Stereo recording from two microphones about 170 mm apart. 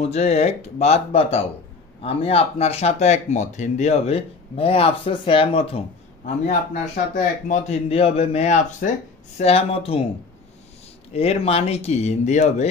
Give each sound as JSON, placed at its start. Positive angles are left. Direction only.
{"t": 0.0, "sound": "speech", "side_deg": 40}
{"t": 6.2, "sound": "a man's voice", "side_deg": 45}
{"t": 11.1, "sound": "speech", "side_deg": 35}